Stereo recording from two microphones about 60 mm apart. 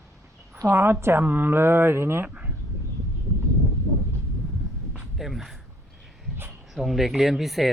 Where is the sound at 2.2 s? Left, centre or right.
Right.